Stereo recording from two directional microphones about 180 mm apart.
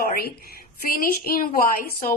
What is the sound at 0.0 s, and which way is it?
A woman's voice, 60° left (ahead or behind).